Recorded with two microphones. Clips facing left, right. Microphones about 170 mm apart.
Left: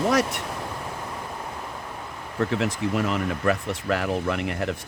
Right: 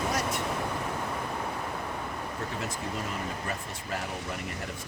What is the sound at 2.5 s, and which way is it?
Speech, 85° left.